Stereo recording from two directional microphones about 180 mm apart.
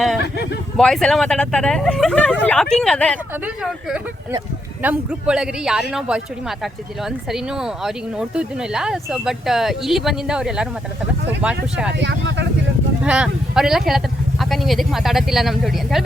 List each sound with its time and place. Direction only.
0.8 s speech: 5° left (ahead or behind)
11.9 s speech: 75° right (ahead or behind)
13.0 s speech: 5° right (ahead or behind)